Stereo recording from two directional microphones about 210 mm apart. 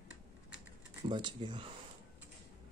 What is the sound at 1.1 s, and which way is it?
Speech, 20° right (ahead or behind).